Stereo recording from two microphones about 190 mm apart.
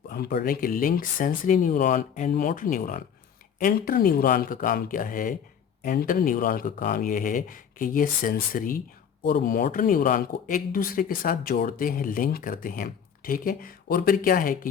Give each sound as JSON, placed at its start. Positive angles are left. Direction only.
{"t": 0.1, "sound": "speech", "side_deg": 55}